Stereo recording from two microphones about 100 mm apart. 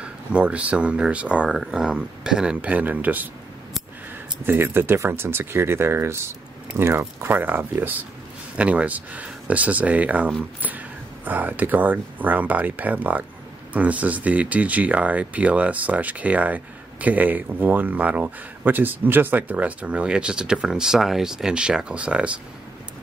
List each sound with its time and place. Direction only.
0.0 s speech: 10° right (ahead or behind)
4.5 s speech: 20° right (ahead or behind)